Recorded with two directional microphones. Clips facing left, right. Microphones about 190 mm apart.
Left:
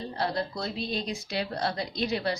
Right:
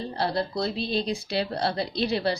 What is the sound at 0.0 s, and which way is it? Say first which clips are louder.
Speech: right 3 dB; 30° right (ahead or behind).